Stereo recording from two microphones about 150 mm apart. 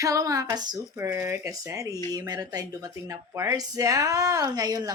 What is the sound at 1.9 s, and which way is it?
Speech, 20° left (ahead or behind).